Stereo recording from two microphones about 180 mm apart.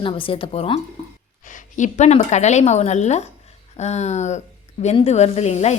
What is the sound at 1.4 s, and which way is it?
A woman's voice, 45° left (ahead or behind).